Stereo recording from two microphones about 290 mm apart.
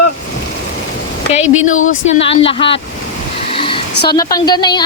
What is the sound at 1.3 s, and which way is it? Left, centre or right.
A woman's voice, left.